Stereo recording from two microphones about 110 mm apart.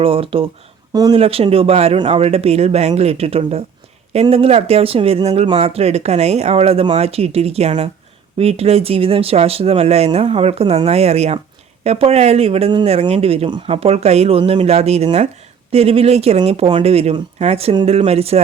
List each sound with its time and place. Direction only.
0.0 s speech: 55° right (ahead or behind)